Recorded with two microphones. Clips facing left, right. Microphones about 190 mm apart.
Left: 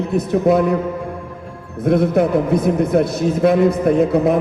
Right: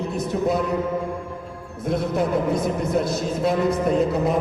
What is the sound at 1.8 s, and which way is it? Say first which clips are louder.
A man's voice: left 8 dB; 55° left (ahead or behind).